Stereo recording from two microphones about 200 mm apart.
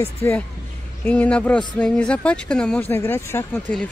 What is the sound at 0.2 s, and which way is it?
Speech, 10° left (ahead or behind).